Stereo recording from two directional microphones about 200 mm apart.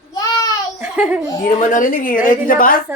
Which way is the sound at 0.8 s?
5° right (ahead or behind).